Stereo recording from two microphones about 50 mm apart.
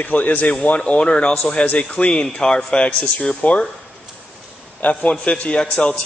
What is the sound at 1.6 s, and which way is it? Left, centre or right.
Speech, left.